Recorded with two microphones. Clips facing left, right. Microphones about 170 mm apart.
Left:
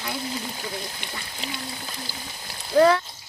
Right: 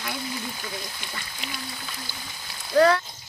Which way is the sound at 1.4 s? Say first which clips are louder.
Left 4 dB; 25° left (ahead or behind).